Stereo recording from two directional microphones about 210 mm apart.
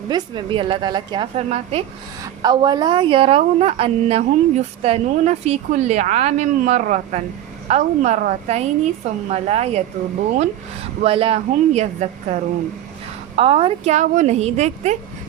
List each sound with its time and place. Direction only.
0.1 s a woman's voice: 20° right (ahead or behind)
2.2 s a woman's voice: 20° right (ahead or behind)
11.0 s a woman's voice: 25° right (ahead or behind)